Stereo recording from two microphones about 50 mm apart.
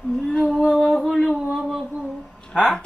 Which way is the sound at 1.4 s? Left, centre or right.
Centre.